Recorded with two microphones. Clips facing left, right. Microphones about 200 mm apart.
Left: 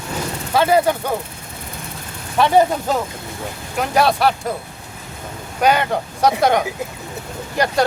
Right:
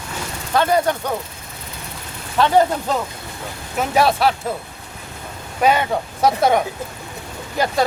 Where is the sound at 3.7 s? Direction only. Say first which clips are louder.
Even; centre (ahead or behind).